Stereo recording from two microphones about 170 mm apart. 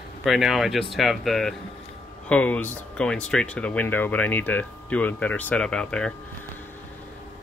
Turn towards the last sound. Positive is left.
turn(degrees=5)  # may be behind; listen again after turning